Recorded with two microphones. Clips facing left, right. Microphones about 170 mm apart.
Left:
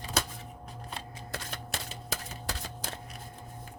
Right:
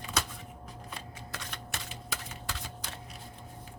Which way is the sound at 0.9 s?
35° left (ahead or behind).